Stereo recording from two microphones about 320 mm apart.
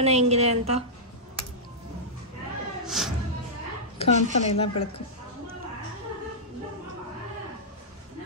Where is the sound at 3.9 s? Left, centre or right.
Centre.